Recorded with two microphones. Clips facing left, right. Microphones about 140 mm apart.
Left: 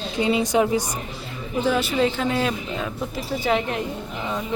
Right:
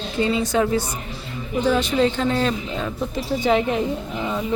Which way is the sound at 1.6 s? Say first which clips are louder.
Right 2 dB; 5° left (ahead or behind).